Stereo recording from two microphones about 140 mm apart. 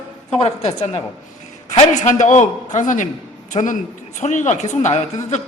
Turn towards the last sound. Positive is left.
turn(degrees=55)  # may be behind; listen again after turning